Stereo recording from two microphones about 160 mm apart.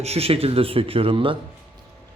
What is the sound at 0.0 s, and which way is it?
Speech, 40° right (ahead or behind).